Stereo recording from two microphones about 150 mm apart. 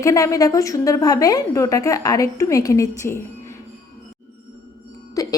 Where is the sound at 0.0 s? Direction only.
20° left (ahead or behind).